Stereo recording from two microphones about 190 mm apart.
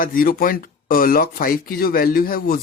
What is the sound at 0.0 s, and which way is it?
Speech, 45° left (ahead or behind).